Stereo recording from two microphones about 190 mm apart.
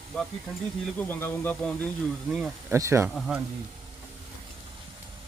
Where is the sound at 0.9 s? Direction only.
10° left (ahead or behind).